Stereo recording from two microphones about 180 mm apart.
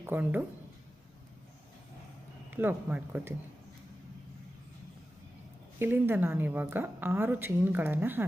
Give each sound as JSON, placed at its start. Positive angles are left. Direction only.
{"t": 0.0, "sound": "speech", "side_deg": -10}
{"t": 2.5, "sound": "a woman's voice", "side_deg": -10}
{"t": 5.8, "sound": "a woman's voice", "side_deg": -10}